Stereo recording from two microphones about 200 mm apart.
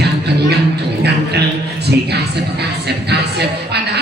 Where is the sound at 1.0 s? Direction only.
55° right (ahead or behind).